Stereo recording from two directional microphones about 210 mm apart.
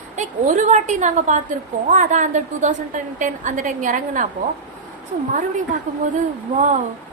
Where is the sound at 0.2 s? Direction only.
35° right (ahead or behind).